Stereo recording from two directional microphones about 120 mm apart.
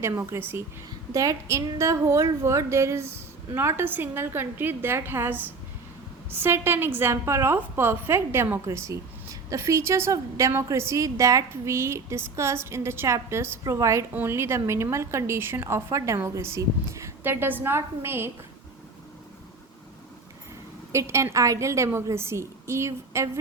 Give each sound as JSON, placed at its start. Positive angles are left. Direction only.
{"t": 0.0, "sound": "a woman's voice", "side_deg": -20}
{"t": 20.9, "sound": "a woman's voice", "side_deg": -25}